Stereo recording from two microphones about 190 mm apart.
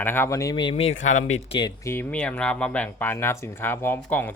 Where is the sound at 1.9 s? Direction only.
10° left (ahead or behind).